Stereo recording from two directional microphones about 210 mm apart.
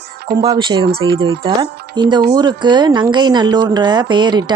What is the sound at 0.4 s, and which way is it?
A woman's voice, 20° right (ahead or behind).